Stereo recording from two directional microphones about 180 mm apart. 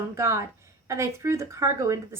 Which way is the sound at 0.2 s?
15° right (ahead or behind).